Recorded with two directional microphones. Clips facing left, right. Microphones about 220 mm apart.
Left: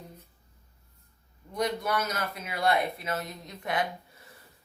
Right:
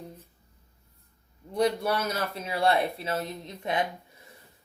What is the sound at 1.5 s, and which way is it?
A man's voice, 30° right (ahead or behind).